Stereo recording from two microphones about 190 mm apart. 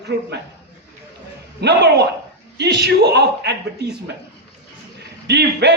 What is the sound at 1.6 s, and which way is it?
A man's voice, 60° right (ahead or behind).